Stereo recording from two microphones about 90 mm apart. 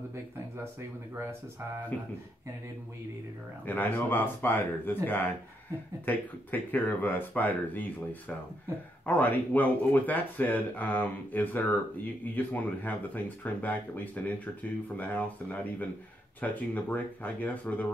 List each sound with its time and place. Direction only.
1.9 s speech: 20° left (ahead or behind)
3.6 s speech: 20° left (ahead or behind)